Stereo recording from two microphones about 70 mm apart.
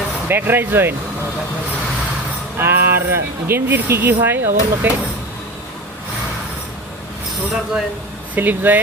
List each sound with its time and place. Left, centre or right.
0.3 s speech: right
2.6 s speech: right
8.4 s speech: right